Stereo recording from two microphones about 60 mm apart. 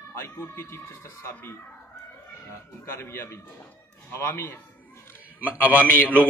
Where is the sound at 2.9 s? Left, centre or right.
Left.